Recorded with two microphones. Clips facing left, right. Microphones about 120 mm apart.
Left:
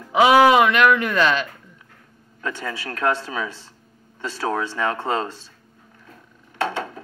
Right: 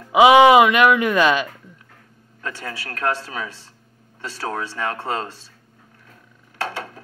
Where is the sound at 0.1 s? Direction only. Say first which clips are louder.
Right 3 dB; 15° right (ahead or behind).